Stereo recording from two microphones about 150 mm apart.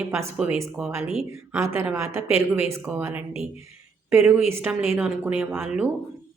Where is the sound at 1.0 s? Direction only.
5° right (ahead or behind).